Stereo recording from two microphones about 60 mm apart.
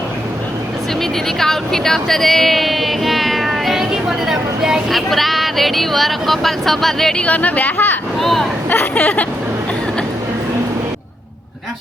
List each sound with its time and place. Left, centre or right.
1.4 s speech: centre
4.3 s vehicle: centre
4.9 s speech: centre
7.2 s speech: left
8.2 s speech: centre
8.7 s speech: left